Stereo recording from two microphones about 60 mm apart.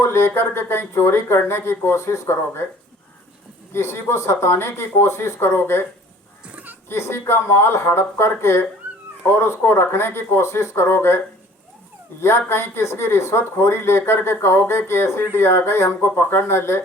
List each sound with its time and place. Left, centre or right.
0.0 s speech: left
3.7 s speech: left
6.8 s speech: left
12.2 s speech: left